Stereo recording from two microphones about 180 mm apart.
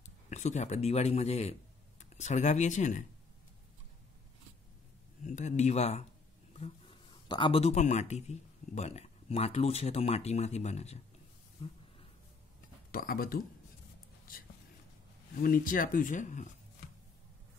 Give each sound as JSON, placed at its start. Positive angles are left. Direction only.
{"t": 0.0, "sound": "speech", "side_deg": 40}
{"t": 5.2, "sound": "speech", "side_deg": 40}
{"t": 11.6, "sound": "a sound", "side_deg": 30}
{"t": 12.9, "sound": "speech", "side_deg": 55}
{"t": 15.4, "sound": "speech", "side_deg": 50}